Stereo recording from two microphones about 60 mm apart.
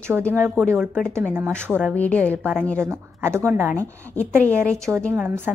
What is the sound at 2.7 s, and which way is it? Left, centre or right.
Speech, right.